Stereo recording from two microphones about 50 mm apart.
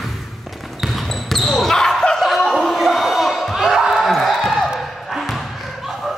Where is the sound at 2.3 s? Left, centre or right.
Centre.